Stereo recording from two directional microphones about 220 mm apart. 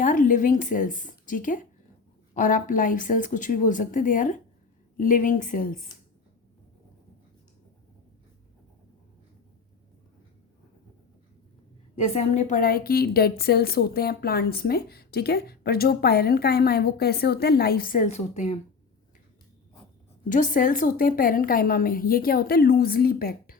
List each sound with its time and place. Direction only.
0.0 s a woman's voice: 35° left (ahead or behind)
11.9 s a woman's voice: 30° left (ahead or behind)
20.3 s a woman's voice: 35° left (ahead or behind)